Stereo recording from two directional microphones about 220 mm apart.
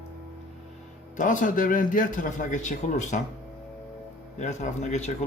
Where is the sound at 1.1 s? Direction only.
35° left (ahead or behind).